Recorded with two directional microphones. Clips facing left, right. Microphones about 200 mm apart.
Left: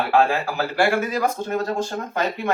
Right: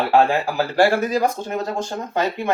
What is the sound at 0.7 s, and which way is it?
Speech, 35° right (ahead or behind).